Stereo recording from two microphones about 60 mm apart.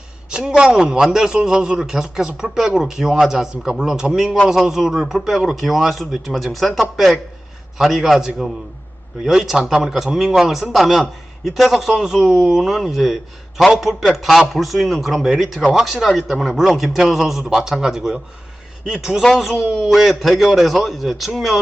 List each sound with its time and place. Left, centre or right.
0.3 s a man's voice: centre
19.2 s a man's voice: centre